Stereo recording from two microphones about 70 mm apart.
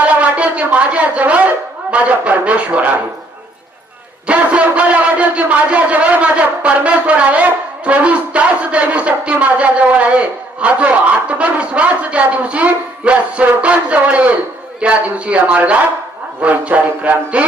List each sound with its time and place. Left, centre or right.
0.0 s speech: centre
4.3 s a man's voice: centre